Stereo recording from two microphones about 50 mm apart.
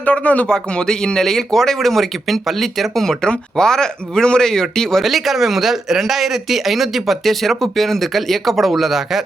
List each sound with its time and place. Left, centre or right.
0.0 s speech: left
0.4 s speech: centre
5.0 s speech: centre